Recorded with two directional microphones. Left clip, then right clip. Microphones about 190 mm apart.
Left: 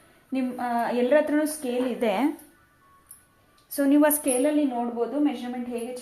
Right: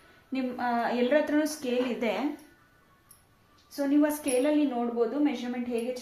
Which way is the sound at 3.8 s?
55° left (ahead or behind).